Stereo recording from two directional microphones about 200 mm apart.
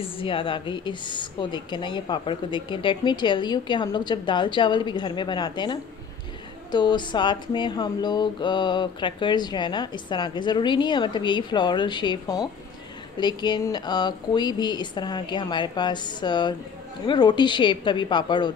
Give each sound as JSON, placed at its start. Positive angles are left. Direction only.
{"t": 0.0, "sound": "speech", "side_deg": 25}